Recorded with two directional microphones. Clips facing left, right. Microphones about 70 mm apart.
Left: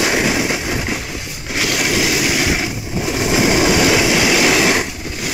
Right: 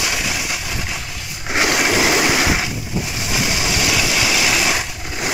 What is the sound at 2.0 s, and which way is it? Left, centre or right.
Vehicle, right.